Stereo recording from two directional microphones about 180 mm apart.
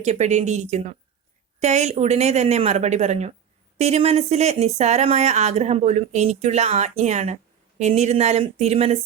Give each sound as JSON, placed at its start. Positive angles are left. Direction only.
{"t": 0.0, "sound": "speech", "side_deg": -40}